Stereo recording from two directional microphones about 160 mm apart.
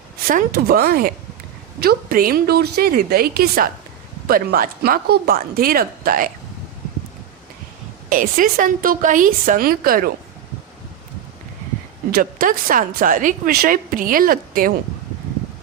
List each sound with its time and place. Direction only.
0.3 s speech: 70° right (ahead or behind)
8.1 s a woman's voice: 60° right (ahead or behind)
12.1 s a woman's voice: 60° right (ahead or behind)